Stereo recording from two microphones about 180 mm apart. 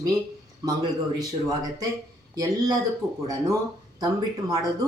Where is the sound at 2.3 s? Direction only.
20° right (ahead or behind).